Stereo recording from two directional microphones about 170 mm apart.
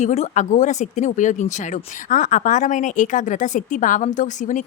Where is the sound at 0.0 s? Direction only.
45° left (ahead or behind).